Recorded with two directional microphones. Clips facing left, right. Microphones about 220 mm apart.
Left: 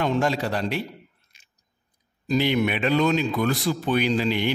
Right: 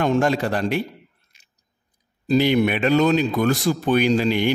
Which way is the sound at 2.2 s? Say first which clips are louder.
Right 4 dB; 40° right (ahead or behind).